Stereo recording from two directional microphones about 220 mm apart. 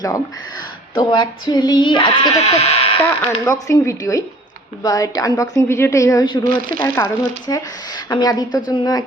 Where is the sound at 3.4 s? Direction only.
15° left (ahead or behind).